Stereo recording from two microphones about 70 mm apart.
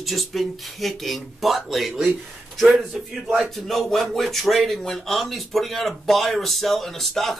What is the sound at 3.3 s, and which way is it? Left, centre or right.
A man's voice, centre.